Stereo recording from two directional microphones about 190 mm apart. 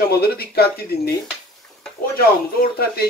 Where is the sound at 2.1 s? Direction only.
55° left (ahead or behind).